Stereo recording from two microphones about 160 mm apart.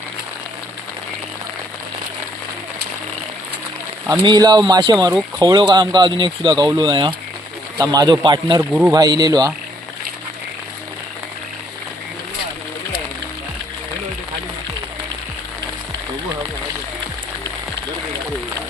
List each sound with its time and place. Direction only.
4.2 s speech: 25° right (ahead or behind)